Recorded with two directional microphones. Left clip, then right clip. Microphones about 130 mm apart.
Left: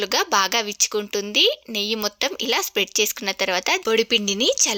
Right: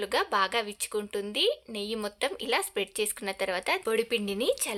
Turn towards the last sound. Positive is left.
turn(degrees=40)  # may be behind; listen again after turning